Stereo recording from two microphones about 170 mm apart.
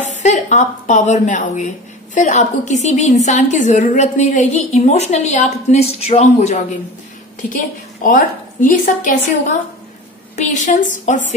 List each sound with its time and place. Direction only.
0.0 s a woman's voice: 45° left (ahead or behind)
8.0 s a woman's voice: 50° left (ahead or behind)
10.3 s a woman's voice: 45° left (ahead or behind)